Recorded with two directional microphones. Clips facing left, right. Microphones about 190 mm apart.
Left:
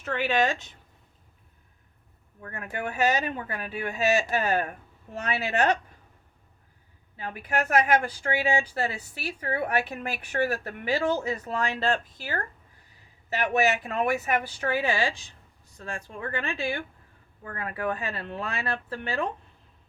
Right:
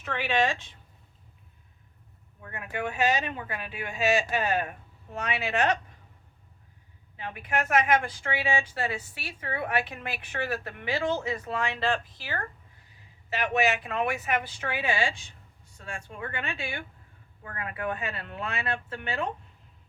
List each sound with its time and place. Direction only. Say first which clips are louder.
0.0 s speech: left 2 dB; 40° left (ahead or behind)
2.5 s a woman's voice: even; 40° left (ahead or behind)
7.2 s a woman's voice: left 2 dB; 40° left (ahead or behind)
13.5 s a woman's voice: left 2 dB; 40° left (ahead or behind)